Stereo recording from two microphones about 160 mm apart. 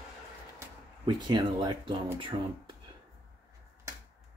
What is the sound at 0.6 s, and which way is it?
Speech, 25° right (ahead or behind).